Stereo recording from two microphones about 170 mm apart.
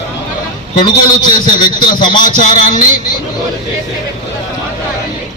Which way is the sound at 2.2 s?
50° left (ahead or behind).